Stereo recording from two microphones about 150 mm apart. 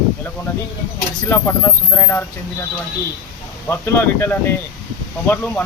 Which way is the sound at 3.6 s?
15° left (ahead or behind).